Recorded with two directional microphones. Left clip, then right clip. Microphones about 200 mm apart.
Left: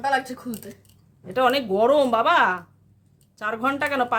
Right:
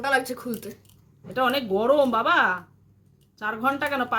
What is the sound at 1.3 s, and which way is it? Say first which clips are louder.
A woman's voice: left 3 dB; 60° left (ahead or behind).